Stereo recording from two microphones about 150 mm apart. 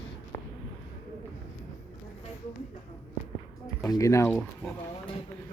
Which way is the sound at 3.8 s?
20° left (ahead or behind).